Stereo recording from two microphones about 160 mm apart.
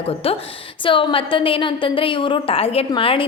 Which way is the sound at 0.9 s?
35° left (ahead or behind).